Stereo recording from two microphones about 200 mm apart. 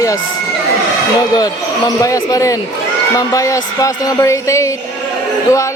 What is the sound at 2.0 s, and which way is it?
Speech, 20° left (ahead or behind).